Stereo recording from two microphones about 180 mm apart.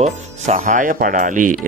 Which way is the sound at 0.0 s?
40° right (ahead or behind).